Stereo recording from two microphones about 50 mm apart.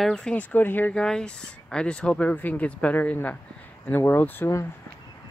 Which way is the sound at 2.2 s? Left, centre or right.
Left.